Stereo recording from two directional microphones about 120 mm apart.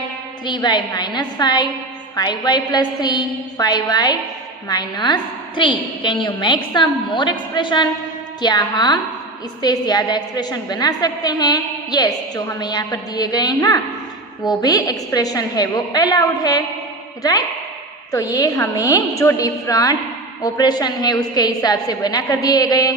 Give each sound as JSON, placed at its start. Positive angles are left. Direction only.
{"t": 0.4, "sound": "a woman's voice", "side_deg": 35}
{"t": 18.1, "sound": "a woman's voice", "side_deg": 30}